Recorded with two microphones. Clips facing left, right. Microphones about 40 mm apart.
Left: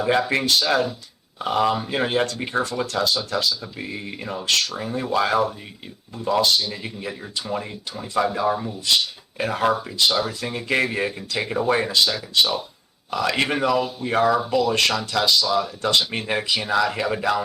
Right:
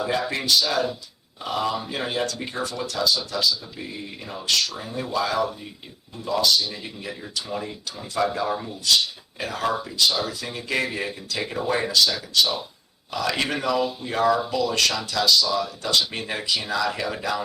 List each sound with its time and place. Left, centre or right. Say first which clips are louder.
0.0 s speech: left 5 dB; left
6.7 s speech: left 3 dB; left
8.2 s speech: left 2 dB; left
9.4 s speech: left 4 dB; left